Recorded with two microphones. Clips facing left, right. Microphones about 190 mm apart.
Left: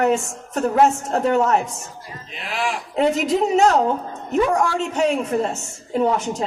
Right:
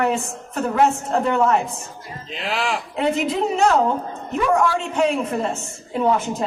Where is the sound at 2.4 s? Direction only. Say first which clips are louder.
Right 1 dB; 70° right (ahead or behind).